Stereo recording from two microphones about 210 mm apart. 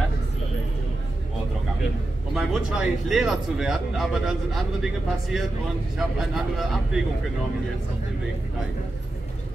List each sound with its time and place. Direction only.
2.3 s speech: centre (ahead or behind)